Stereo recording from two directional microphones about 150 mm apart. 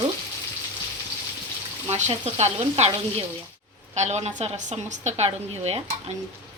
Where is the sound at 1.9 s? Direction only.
50° right (ahead or behind).